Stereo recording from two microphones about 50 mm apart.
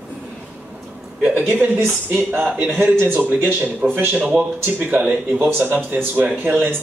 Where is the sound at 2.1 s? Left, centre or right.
Right.